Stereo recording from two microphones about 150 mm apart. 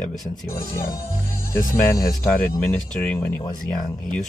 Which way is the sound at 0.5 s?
20° left (ahead or behind).